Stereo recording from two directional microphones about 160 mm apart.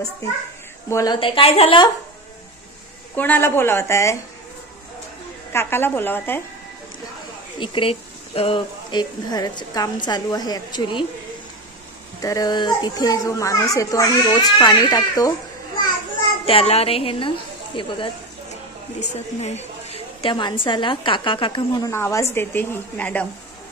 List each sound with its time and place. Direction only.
0.8 s a woman's voice: 20° left (ahead or behind)
3.2 s a woman's voice: 10° left (ahead or behind)
5.5 s a woman's voice: 15° left (ahead or behind)
7.5 s a woman's voice: 30° left (ahead or behind)
12.2 s a woman's voice: 20° left (ahead or behind)
16.4 s a woman's voice: 40° left (ahead or behind)
18.9 s a woman's voice: 45° left (ahead or behind); by 23.2 s 10° left (ahead or behind)